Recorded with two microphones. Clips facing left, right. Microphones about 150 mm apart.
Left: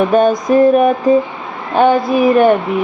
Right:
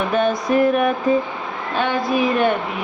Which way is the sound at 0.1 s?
45° left (ahead or behind).